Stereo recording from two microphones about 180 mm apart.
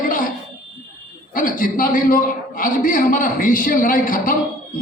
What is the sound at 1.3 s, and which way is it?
A man's voice, 50° left (ahead or behind).